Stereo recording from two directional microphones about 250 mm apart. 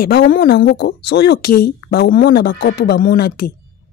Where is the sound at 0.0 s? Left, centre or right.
Left.